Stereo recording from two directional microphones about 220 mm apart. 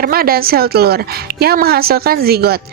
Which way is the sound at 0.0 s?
45° right (ahead or behind).